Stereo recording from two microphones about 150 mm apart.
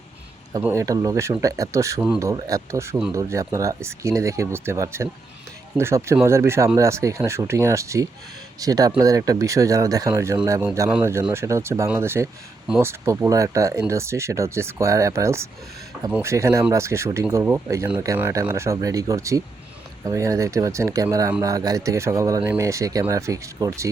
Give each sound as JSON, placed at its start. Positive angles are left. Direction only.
{"t": 0.6, "sound": "speech", "side_deg": -20}